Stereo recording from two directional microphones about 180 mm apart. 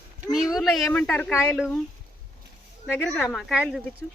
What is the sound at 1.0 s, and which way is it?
Speech, 15° left (ahead or behind).